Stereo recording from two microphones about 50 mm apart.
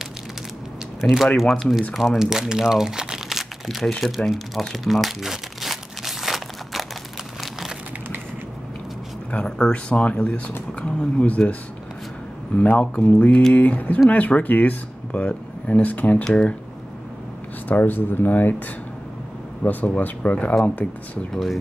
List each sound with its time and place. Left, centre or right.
1.0 s speech: centre
4.3 s crumpling: centre
9.3 s speech: left
12.5 s speech: left
17.6 s speech: left
19.6 s speech: left
21.3 s speech: centre